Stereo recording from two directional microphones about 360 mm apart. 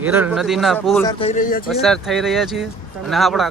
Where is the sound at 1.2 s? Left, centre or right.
Centre.